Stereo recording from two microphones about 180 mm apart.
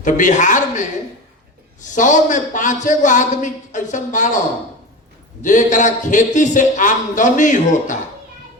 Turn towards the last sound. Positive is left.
turn(degrees=45)  # may be behind; listen again after turning